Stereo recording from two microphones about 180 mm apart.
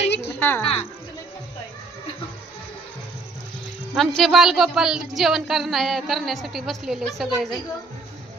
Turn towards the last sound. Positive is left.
turn(degrees=0)  # may be behind; listen again after turning